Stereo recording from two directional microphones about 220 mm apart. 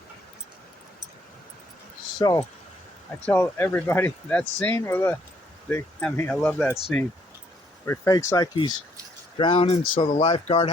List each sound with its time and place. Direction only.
2.1 s speech: 15° left (ahead or behind); by 7.0 s centre (ahead or behind)
7.9 s speech: 15° left (ahead or behind)